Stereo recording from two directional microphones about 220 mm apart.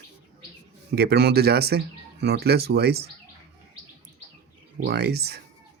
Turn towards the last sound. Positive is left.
turn(degrees=-50)  # may be behind; listen again after turning